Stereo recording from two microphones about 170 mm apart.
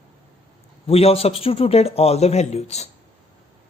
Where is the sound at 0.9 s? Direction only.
35° left (ahead or behind).